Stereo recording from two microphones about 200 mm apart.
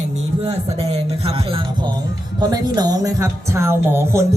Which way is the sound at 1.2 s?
30° right (ahead or behind).